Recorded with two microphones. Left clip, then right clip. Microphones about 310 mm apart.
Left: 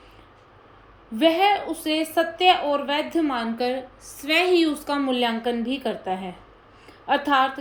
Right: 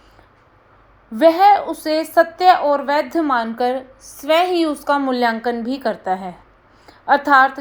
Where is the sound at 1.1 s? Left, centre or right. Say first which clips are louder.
Right 8 dB; centre.